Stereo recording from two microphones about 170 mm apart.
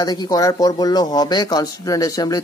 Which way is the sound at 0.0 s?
25° left (ahead or behind).